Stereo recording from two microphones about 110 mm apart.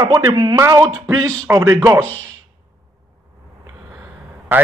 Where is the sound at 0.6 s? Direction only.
25° right (ahead or behind).